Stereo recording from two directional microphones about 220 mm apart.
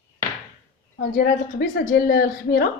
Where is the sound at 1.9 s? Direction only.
40° left (ahead or behind).